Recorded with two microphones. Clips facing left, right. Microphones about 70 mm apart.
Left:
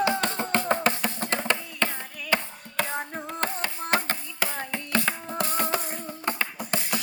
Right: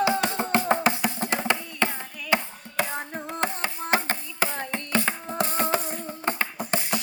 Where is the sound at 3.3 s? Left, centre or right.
Centre.